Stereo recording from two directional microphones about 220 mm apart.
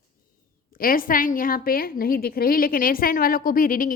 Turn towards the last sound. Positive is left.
turn(degrees=40)  # may be behind; listen again after turning